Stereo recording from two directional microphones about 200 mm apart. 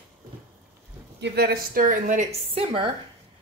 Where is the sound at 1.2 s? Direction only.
55° right (ahead or behind).